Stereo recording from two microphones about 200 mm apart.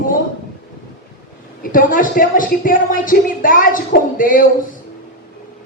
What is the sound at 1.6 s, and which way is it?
Speech, 45° left (ahead or behind).